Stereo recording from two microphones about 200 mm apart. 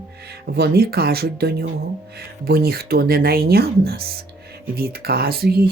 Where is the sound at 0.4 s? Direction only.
55° right (ahead or behind).